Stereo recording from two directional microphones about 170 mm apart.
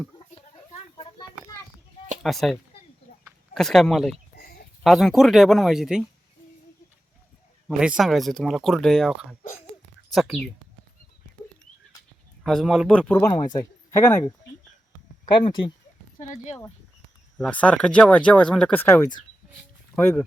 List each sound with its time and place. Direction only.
0.3 s a sound: 30° left (ahead or behind)
2.2 s speech: centre (ahead or behind)
7.8 s speech: 5° right (ahead or behind)
12.5 s speech: centre (ahead or behind)
13.3 s speech: 20° left (ahead or behind)
16.2 s speech: 45° left (ahead or behind)
17.3 s speech: 5° left (ahead or behind)